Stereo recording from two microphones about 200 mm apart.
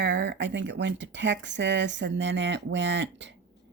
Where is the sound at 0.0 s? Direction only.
60° right (ahead or behind).